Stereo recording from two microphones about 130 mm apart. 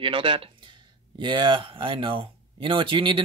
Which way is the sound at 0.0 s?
40° right (ahead or behind).